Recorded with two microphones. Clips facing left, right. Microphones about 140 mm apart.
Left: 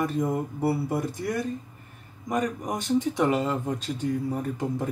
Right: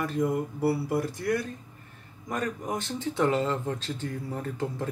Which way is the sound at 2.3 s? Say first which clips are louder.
Left 3 dB; 15° left (ahead or behind).